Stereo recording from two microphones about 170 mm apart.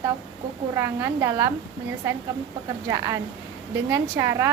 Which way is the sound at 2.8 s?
15° right (ahead or behind).